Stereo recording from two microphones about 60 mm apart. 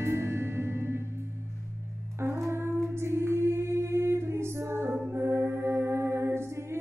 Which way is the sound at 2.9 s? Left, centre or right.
Right.